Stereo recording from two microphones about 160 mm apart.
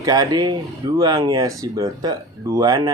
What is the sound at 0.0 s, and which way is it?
Speech, 25° right (ahead or behind).